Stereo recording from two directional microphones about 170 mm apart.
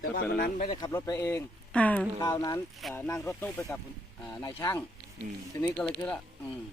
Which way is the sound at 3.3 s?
5° left (ahead or behind).